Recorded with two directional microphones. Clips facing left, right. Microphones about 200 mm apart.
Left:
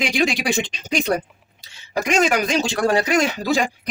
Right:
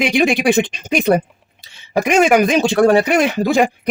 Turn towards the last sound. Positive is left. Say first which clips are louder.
# right 5 dB
turn(degrees=-55)  # may be behind; listen again after turning